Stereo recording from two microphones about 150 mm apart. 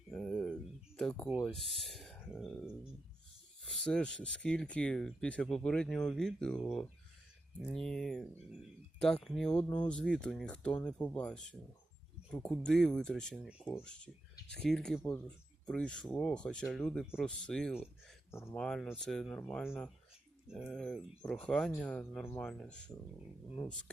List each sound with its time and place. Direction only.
0.1 s a sound: 5° left (ahead or behind)
1.5 s speech: centre (ahead or behind)
3.7 s speech: 5° left (ahead or behind)
18.3 s speech: 15° left (ahead or behind)
18.6 s speech: 5° left (ahead or behind)